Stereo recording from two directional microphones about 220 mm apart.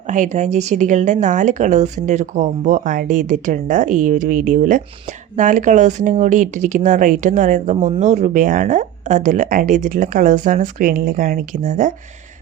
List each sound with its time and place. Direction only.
0.1 s speech: 35° right (ahead or behind)